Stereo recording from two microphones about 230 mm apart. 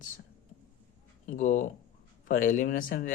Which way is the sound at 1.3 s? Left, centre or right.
Left.